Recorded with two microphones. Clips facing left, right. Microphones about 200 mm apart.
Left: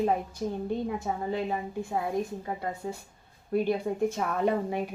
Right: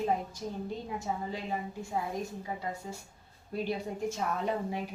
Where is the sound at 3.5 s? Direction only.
55° left (ahead or behind).